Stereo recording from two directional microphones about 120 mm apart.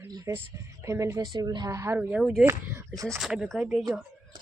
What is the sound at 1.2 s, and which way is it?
Speech, 35° right (ahead or behind).